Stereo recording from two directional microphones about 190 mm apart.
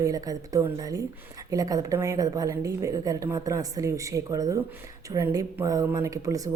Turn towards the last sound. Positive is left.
turn(degrees=-15)  # may be behind; listen again after turning